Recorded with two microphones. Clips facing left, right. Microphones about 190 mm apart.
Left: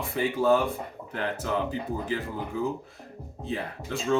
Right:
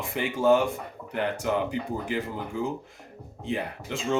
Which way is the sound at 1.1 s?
15° right (ahead or behind).